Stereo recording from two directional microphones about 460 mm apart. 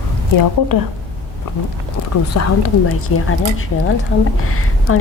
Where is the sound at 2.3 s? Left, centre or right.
Left.